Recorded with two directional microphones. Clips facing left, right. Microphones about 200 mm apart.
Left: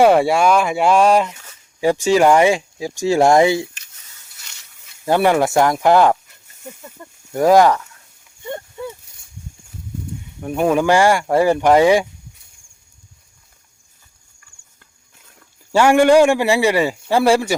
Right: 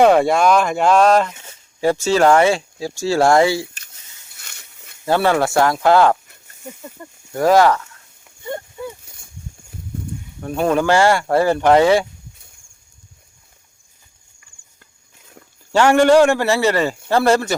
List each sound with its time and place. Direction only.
0.0 s speech: 10° left (ahead or behind)
4.4 s a sound: 55° right (ahead or behind)
5.0 s speech: 15° left (ahead or behind)
7.3 s speech: 15° left (ahead or behind)
10.4 s speech: 10° left (ahead or behind)
15.7 s speech: 10° left (ahead or behind)